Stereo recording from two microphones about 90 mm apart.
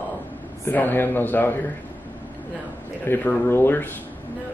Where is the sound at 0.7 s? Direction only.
20° left (ahead or behind).